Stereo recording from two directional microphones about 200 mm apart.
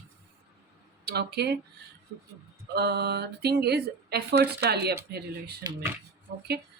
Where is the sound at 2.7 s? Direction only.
55° right (ahead or behind).